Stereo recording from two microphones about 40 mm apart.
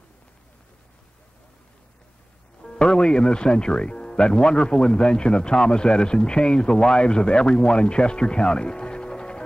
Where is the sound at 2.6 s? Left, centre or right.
Left.